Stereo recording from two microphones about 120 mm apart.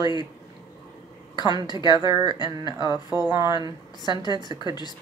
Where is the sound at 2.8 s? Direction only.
30° right (ahead or behind).